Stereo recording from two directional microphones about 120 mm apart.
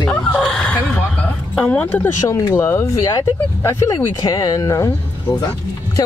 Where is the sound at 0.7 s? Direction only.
10° left (ahead or behind); by 4.9 s 30° left (ahead or behind).